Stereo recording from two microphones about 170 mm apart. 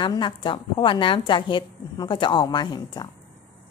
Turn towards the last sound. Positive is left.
turn(degrees=25)  # may be behind; listen again after turning